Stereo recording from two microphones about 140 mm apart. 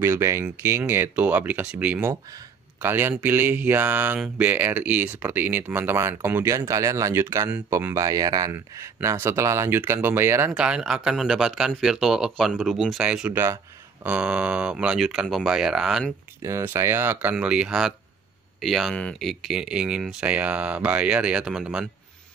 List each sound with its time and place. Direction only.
0.0 s speech: 20° right (ahead or behind)
10.5 s speech: 5° right (ahead or behind)
16.4 s speech: 20° right (ahead or behind)